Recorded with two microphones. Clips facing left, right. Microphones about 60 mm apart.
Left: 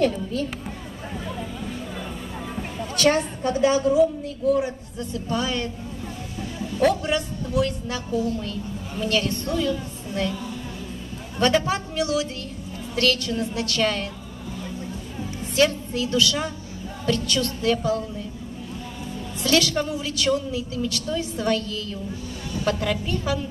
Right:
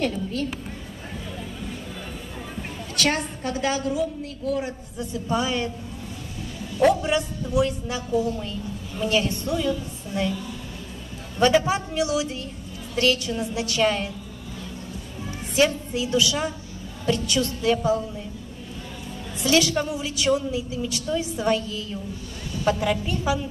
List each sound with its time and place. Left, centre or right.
3.0 s a woman's voice: right
4.9 s a woman's voice: centre
6.8 s a woman's voice: centre
11.3 s a woman's voice: centre
15.5 s a woman's voice: centre
19.4 s a woman's voice: centre